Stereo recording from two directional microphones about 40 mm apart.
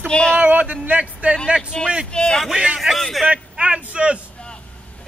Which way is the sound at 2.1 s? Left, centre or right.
Left.